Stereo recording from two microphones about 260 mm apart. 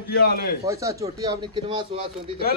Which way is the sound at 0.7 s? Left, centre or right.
Centre.